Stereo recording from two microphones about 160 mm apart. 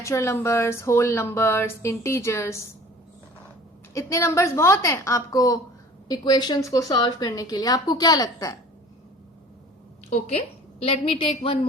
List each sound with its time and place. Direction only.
0.0 s speech: 20° left (ahead or behind)
3.9 s a woman's voice: 20° left (ahead or behind)
10.1 s a woman's voice: 45° left (ahead or behind)